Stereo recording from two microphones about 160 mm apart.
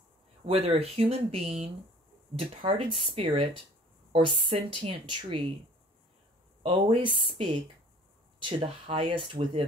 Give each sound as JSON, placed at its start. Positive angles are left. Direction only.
{"t": 0.5, "sound": "speech", "side_deg": -40}
{"t": 6.6, "sound": "speech", "side_deg": -30}